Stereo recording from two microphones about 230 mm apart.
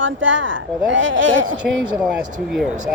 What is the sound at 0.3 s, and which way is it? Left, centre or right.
A woman's voice, right.